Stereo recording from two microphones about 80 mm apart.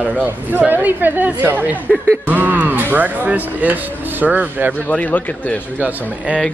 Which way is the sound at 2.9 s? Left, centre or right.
Right.